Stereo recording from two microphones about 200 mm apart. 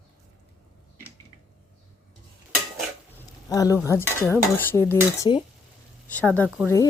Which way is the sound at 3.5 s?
15° left (ahead or behind).